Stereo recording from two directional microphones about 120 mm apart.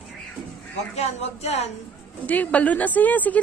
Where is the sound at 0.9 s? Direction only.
65° left (ahead or behind).